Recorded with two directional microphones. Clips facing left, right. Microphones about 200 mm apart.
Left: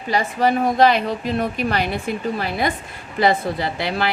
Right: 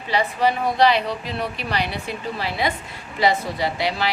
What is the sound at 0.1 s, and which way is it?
A woman's voice, 45° left (ahead or behind).